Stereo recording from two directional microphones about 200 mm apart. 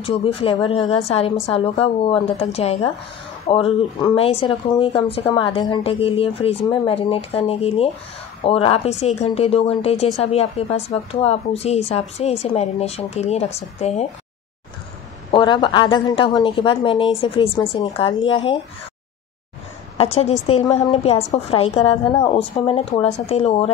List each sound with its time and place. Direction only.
0.0 s a woman's voice: 30° left (ahead or behind)
15.3 s a woman's voice: 20° left (ahead or behind)
20.0 s a woman's voice: 30° left (ahead or behind)